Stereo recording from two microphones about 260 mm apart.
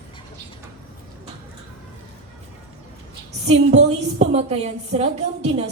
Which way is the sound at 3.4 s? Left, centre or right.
Right.